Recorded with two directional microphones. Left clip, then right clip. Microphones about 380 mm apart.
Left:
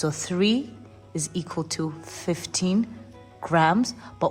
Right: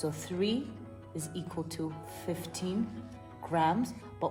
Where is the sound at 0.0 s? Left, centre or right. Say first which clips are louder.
Left 8 dB; left.